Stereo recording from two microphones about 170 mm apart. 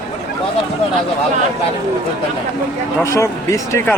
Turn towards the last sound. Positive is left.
turn(degrees=15)  # may be behind; listen again after turning